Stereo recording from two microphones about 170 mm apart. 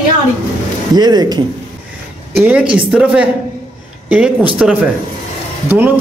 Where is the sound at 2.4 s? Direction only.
5° right (ahead or behind).